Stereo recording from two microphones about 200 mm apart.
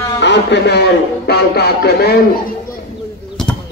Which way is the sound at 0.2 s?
60° left (ahead or behind).